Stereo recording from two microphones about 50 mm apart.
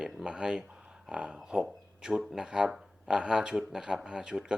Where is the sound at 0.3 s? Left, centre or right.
Centre.